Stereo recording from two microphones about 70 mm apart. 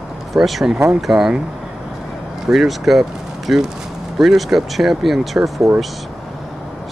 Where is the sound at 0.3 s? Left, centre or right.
Centre.